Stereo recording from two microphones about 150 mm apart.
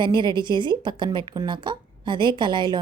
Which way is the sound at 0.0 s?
30° right (ahead or behind).